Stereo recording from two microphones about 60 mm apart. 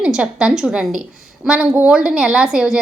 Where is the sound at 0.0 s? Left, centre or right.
Centre.